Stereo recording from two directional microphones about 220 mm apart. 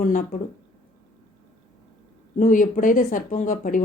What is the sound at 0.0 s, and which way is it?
Speech, 35° left (ahead or behind).